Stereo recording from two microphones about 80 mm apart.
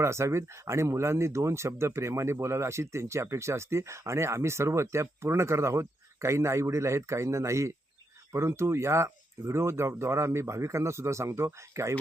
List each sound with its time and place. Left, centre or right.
0.0 s speech: right